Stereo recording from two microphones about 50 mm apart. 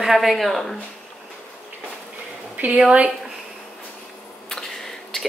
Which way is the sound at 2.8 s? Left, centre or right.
Centre.